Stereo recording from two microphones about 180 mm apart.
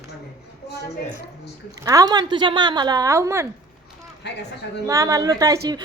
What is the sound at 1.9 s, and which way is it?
Speech, 20° right (ahead or behind).